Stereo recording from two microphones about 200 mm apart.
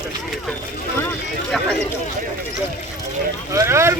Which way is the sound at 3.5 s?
15° right (ahead or behind).